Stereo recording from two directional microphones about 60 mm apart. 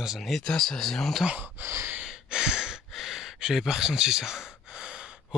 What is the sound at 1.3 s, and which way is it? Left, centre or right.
Speech, right.